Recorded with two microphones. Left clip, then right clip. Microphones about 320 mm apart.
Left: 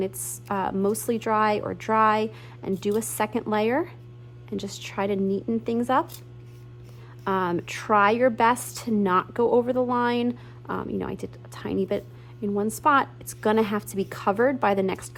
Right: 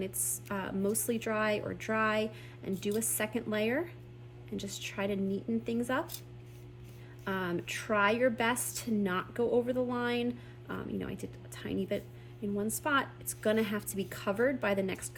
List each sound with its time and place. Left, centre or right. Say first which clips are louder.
0.5 s a woman's voice: left 10 dB; centre
7.3 s a woman's voice: left 10 dB; centre